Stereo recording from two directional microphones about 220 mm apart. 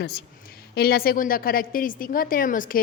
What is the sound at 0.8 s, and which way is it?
A woman's voice, 45° left (ahead or behind).